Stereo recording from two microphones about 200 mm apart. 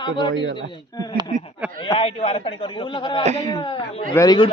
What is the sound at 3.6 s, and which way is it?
Speech, 25° left (ahead or behind).